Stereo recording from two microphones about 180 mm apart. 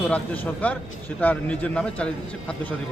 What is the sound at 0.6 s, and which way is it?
A man's voice, 10° left (ahead or behind).